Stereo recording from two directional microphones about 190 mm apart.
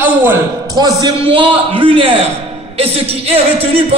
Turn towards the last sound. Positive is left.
turn(degrees=-30)  # may be behind; listen again after turning